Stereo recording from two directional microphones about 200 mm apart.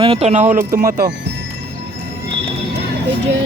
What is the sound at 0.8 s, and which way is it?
Speech, 45° right (ahead or behind).